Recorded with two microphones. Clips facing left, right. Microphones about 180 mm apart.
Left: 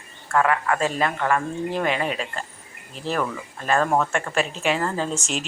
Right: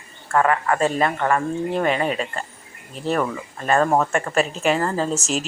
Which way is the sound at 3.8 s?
30° right (ahead or behind).